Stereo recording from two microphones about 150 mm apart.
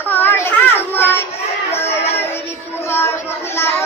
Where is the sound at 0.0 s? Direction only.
15° left (ahead or behind).